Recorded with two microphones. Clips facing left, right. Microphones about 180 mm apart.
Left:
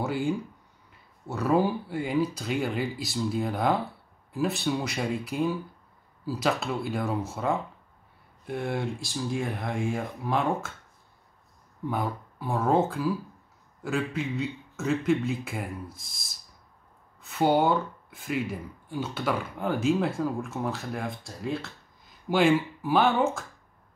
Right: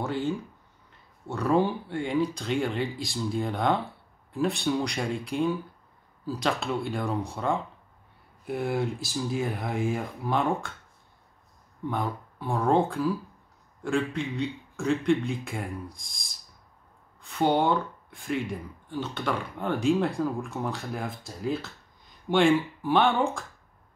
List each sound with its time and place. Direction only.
0.0 s speech: 10° left (ahead or behind)
11.9 s speech: 5° left (ahead or behind)